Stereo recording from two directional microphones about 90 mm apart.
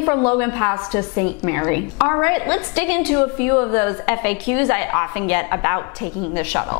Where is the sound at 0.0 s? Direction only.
20° left (ahead or behind).